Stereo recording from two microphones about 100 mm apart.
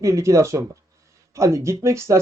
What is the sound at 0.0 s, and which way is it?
Speech, 30° right (ahead or behind).